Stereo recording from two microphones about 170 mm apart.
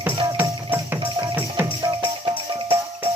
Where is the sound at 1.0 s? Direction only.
30° right (ahead or behind).